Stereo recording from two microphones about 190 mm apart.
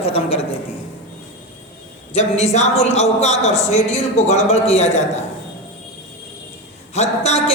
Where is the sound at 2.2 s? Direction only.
35° left (ahead or behind).